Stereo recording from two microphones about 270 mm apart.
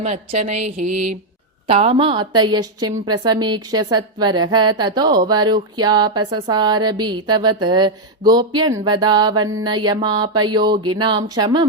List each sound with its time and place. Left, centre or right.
0.0 s a woman's voice: right